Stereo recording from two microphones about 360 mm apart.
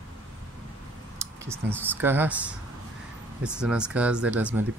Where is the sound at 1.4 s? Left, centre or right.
Centre.